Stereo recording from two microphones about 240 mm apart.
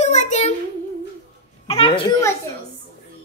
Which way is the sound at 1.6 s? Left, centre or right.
Left.